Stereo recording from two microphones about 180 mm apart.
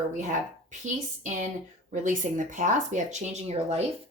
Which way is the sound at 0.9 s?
45° right (ahead or behind).